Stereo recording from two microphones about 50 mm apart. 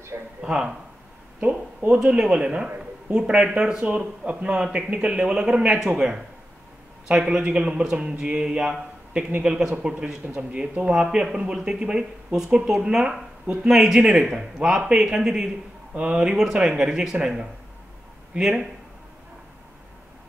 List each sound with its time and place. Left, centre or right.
0.4 s speech: centre
2.0 s speech: centre
10.2 s speech: right
10.9 s speech: centre
15.9 s speech: right